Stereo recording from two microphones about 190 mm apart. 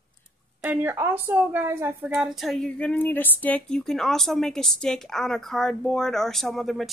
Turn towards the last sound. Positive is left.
turn(degrees=0)  # may be behind; listen again after turning